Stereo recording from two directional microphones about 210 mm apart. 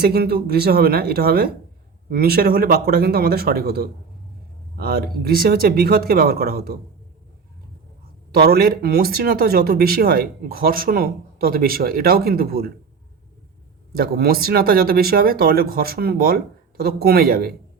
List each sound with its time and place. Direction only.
0.0 s speech: 45° right (ahead or behind)
8.3 s speech: 45° right (ahead or behind)
13.9 s speech: 45° right (ahead or behind)